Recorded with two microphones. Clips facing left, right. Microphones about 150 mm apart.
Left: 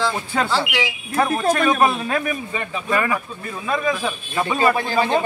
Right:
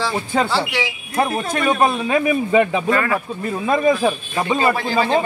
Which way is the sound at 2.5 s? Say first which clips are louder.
Right 12 dB; 90° right.